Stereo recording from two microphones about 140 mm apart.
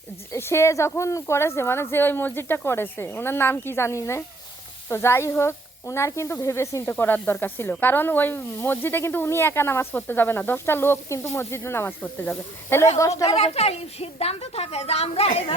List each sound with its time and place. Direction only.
0.3 s speech: 20° left (ahead or behind)
13.0 s speech: 25° left (ahead or behind)
13.2 s a woman's voice: 45° left (ahead or behind)